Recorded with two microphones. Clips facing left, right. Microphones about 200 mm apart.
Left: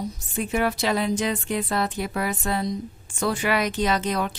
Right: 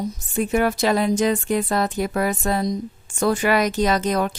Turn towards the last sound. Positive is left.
turn(degrees=-45)  # may be behind; listen again after turning